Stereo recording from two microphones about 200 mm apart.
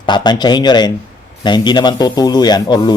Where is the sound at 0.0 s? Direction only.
20° left (ahead or behind).